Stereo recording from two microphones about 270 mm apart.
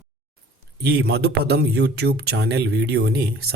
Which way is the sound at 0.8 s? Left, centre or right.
Right.